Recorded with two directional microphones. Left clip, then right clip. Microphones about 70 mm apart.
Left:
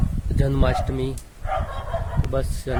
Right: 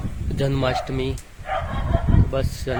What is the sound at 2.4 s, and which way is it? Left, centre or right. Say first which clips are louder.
Speech: left 3 dB; left.